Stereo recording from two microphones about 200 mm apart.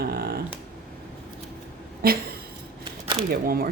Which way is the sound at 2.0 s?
50° right (ahead or behind).